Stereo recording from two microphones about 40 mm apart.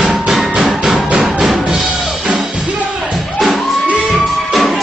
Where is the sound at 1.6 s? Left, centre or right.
Centre.